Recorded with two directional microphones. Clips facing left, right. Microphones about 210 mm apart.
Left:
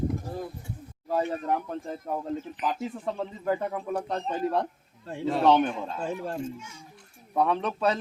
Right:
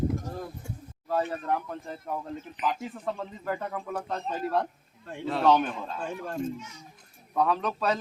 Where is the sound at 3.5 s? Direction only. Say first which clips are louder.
Left 4 dB; 20° left (ahead or behind).